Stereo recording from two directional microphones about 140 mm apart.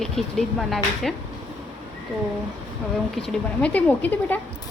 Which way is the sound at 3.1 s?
5° left (ahead or behind).